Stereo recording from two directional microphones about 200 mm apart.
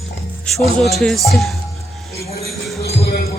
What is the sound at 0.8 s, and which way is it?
Speech, centre (ahead or behind).